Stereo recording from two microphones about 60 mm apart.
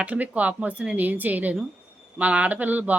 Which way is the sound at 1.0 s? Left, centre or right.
Right.